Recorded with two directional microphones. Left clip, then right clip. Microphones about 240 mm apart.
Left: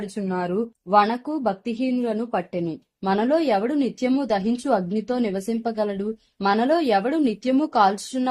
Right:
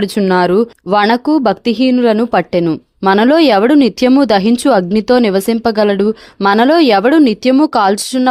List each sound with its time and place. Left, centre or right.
0.0 s speech: right